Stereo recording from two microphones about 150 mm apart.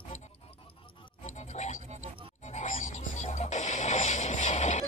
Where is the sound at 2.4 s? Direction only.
55° left (ahead or behind).